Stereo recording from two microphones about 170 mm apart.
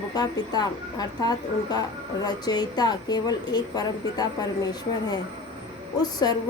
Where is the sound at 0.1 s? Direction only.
25° left (ahead or behind).